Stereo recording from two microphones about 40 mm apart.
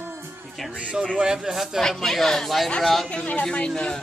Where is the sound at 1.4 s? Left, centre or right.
Centre.